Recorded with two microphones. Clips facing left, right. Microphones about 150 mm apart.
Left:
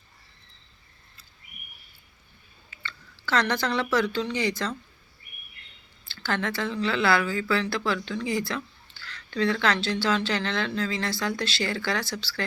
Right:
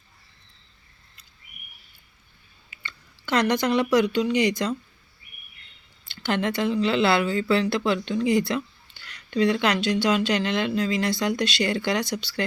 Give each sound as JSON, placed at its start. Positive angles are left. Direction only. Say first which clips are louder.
{"t": 2.8, "sound": "speech", "louder": "left 2 dB", "side_deg": -15}
{"t": 6.1, "sound": "speech", "louder": "right 4 dB", "side_deg": -20}